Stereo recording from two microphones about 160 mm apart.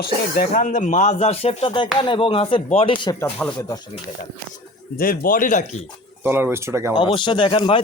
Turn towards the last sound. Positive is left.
turn(degrees=30)  # may be behind; listen again after turning